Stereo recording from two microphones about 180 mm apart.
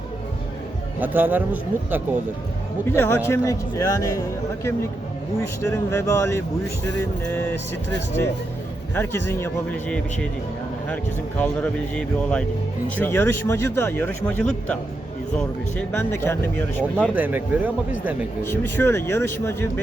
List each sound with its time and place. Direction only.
0.9 s speech: 10° right (ahead or behind)
2.8 s speech: 15° left (ahead or behind)
5.4 s speech: 15° left (ahead or behind)
9.0 s speech: 10° left (ahead or behind)
17.2 s speech: 10° right (ahead or behind)
18.4 s speech: 10° left (ahead or behind)